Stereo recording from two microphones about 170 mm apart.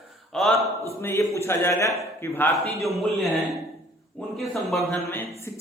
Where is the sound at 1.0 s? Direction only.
15° left (ahead or behind).